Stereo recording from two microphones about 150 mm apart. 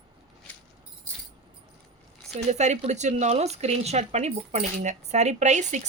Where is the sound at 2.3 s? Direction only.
50° right (ahead or behind).